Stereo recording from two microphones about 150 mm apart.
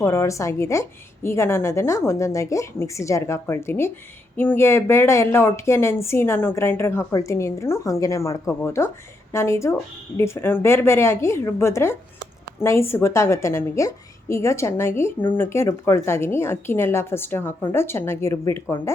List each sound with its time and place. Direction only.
0.0 s a woman's voice: 20° left (ahead or behind)